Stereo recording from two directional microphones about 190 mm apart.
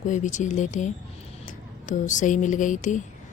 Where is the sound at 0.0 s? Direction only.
40° left (ahead or behind).